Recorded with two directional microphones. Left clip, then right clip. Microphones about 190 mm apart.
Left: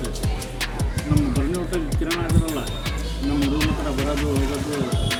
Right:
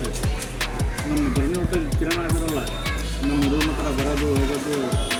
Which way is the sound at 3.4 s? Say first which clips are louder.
Right 1 dB; centre (ahead or behind).